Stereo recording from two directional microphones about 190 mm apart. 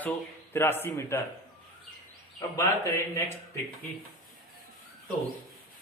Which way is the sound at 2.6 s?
15° left (ahead or behind).